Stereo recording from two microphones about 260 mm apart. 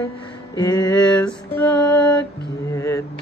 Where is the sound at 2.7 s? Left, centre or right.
Centre.